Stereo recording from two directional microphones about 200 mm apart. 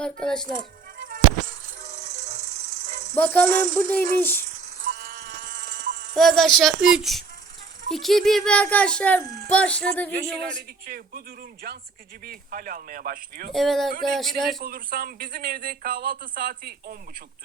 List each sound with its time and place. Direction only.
0.0 s speech: 5° left (ahead or behind)
1.0 s music: 40° right (ahead or behind)
3.2 s speech: 10° left (ahead or behind)
3.5 s music: 40° right (ahead or behind)
3.8 s speech: 10° left (ahead or behind)
4.4 s insect: 40° right (ahead or behind)
6.1 s speech: centre (ahead or behind)
10.8 s speech: 45° right (ahead or behind)
12.2 s speech: 45° right (ahead or behind)
13.5 s speech: centre (ahead or behind)
14.6 s speech: 50° right (ahead or behind)